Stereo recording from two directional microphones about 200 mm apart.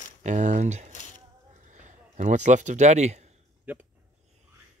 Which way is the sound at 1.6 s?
40° right (ahead or behind).